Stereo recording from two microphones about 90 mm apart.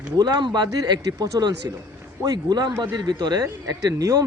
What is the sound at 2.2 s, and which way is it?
Speech, 30° right (ahead or behind).